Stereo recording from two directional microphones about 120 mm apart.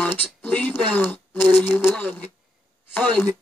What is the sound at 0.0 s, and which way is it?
Speech, 15° left (ahead or behind).